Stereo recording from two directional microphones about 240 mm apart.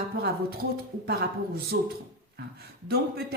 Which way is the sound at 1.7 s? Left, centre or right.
Right.